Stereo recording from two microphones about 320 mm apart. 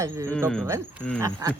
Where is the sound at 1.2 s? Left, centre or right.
Centre.